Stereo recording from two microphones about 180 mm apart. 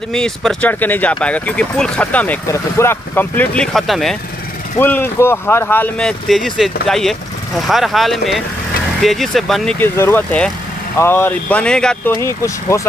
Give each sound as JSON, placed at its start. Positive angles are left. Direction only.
{"t": 0.1, "sound": "speech", "side_deg": 0}
{"t": 4.7, "sound": "speech", "side_deg": 10}
{"t": 9.8, "sound": "speech", "side_deg": 10}
{"t": 12.2, "sound": "speech", "side_deg": 15}